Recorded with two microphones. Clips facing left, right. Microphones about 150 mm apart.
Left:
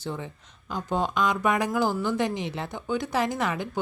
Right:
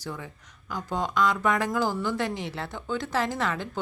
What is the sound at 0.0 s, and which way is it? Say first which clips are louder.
Speech: left 3 dB; 25° left (ahead or behind).